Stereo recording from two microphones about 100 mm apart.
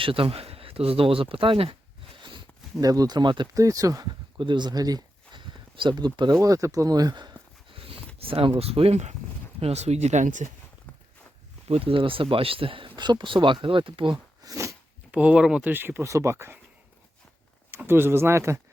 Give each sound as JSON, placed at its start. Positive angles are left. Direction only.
{"t": 0.0, "sound": "speech", "side_deg": -65}
{"t": 2.7, "sound": "speech", "side_deg": -35}
{"t": 3.5, "sound": "speech", "side_deg": -35}
{"t": 6.4, "sound": "speech", "side_deg": -35}
{"t": 7.8, "sound": "a sound", "side_deg": -70}
{"t": 8.2, "sound": "speech", "side_deg": -65}
{"t": 11.7, "sound": "speech", "side_deg": -70}
{"t": 14.4, "sound": "a sound", "side_deg": -30}
{"t": 15.1, "sound": "speech", "side_deg": -10}
{"t": 15.7, "sound": "speech", "side_deg": -20}
{"t": 17.7, "sound": "speech", "side_deg": -25}